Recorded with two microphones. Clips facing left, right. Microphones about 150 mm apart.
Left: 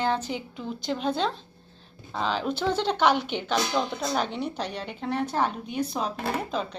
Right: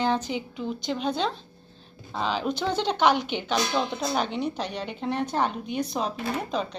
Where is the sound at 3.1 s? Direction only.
35° left (ahead or behind).